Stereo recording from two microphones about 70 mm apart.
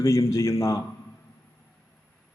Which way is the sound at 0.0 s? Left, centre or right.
Left.